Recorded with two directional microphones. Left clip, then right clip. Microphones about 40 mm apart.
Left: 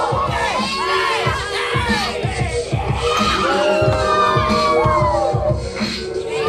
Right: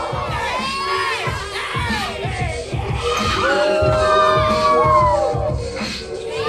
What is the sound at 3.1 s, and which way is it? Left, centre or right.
Music, centre.